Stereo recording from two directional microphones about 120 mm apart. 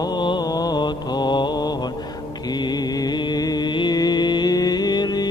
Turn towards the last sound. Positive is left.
turn(degrees=35)  # may be behind; listen again after turning